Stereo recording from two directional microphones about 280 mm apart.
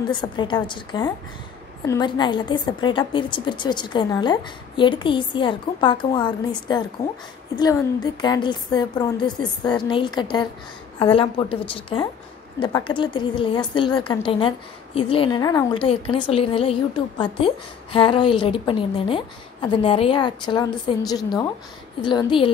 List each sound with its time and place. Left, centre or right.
0.1 s a woman's voice: centre
17.9 s a woman's voice: centre